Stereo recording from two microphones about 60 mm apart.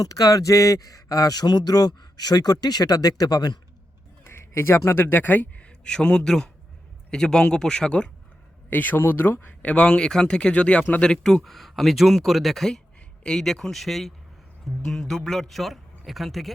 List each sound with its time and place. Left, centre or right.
0.0 s speech: left
4.2 s a man's voice: left
5.6 s a man's voice: centre
8.7 s speech: left
11.1 s speech: centre